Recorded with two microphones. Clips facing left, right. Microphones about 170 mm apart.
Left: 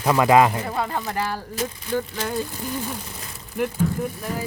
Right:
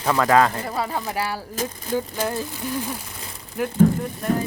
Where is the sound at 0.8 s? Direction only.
5° right (ahead or behind).